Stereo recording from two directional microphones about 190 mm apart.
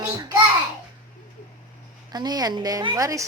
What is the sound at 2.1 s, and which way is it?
A woman's voice, 20° right (ahead or behind).